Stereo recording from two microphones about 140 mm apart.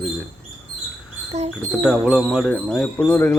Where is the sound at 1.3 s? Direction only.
50° right (ahead or behind).